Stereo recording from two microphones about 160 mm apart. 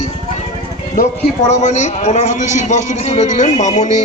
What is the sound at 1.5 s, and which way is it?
A man's voice, 50° left (ahead or behind).